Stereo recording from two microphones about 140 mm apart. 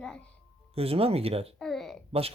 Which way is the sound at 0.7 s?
45° right (ahead or behind).